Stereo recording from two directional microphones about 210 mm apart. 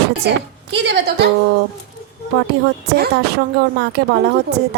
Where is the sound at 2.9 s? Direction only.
50° right (ahead or behind).